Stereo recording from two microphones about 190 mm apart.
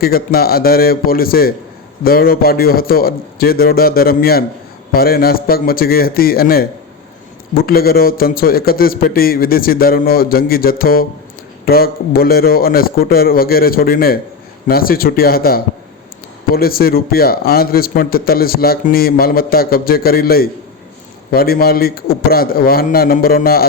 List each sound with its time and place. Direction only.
0.0 s a man's voice: 50° left (ahead or behind)